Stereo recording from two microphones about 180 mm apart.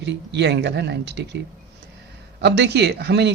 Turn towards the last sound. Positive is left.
turn(degrees=-70)  # may be behind; listen again after turning